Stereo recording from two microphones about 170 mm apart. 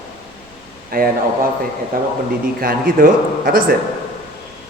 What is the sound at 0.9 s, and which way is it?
A man's voice, 60° right (ahead or behind).